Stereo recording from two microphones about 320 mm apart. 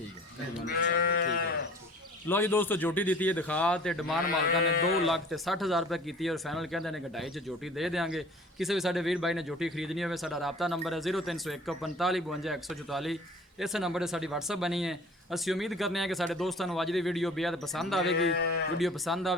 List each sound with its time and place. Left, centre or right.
0.7 s sheep: left
2.2 s speech: centre
4.3 s sheep: left
5.0 s speech: centre
18.1 s speech: left
18.8 s speech: centre